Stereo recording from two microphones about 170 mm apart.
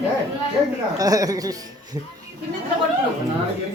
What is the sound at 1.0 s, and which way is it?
Speech, 20° right (ahead or behind).